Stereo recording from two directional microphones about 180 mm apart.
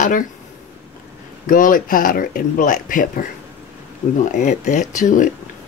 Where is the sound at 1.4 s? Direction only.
50° left (ahead or behind).